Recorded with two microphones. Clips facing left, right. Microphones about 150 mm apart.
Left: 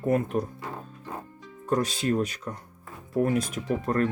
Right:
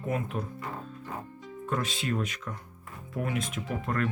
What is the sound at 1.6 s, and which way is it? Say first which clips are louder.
Speech: left 6 dB; 40° left (ahead or behind).